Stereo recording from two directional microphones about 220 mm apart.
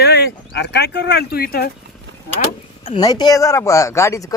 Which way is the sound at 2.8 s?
20° left (ahead or behind).